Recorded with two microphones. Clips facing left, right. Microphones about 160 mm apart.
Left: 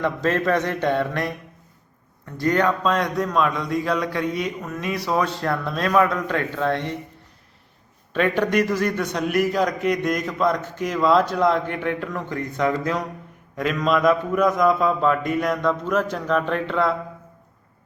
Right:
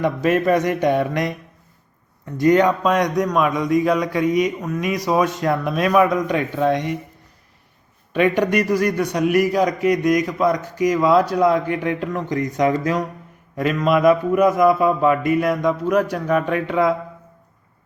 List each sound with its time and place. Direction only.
0.0 s a man's voice: 10° right (ahead or behind)
8.1 s a man's voice: 10° right (ahead or behind)